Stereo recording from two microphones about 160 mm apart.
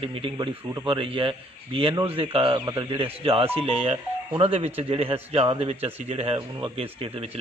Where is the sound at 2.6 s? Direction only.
25° right (ahead or behind).